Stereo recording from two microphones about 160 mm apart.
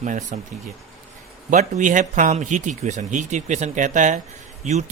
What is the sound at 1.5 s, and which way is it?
A man's voice, 50° right (ahead or behind).